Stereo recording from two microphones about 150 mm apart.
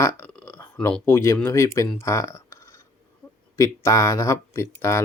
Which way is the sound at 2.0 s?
20° left (ahead or behind).